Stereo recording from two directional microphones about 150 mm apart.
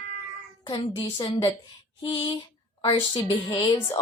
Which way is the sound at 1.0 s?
30° left (ahead or behind).